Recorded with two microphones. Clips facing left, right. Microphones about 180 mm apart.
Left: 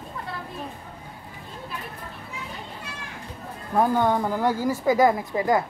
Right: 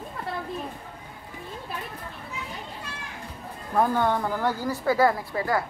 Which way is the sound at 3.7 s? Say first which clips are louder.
Left 2 dB; 15° left (ahead or behind).